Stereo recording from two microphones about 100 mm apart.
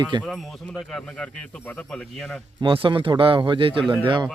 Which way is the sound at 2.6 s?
60° right (ahead or behind).